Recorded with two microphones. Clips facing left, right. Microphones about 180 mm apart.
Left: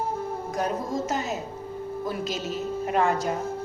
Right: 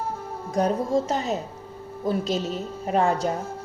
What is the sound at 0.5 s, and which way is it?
Speech, 30° right (ahead or behind).